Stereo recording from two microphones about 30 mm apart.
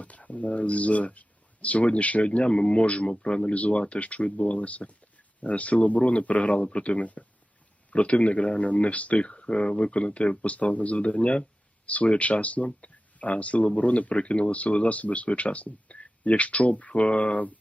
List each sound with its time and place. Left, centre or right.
0.0 s speech: left
10.4 s speech: left